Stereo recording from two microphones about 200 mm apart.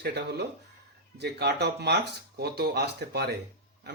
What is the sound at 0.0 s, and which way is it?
Speech, 55° right (ahead or behind).